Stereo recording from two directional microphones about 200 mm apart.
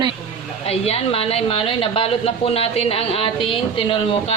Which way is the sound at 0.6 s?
30° left (ahead or behind).